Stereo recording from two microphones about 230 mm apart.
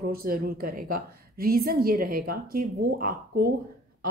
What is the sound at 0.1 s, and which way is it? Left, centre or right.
Speech, right.